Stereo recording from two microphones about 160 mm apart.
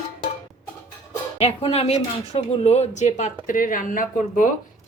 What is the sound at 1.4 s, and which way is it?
Speech, 40° left (ahead or behind).